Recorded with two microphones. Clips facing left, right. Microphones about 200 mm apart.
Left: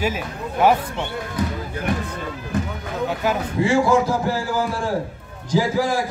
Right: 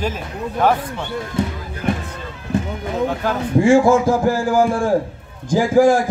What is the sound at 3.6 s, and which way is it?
Speech, 50° right (ahead or behind).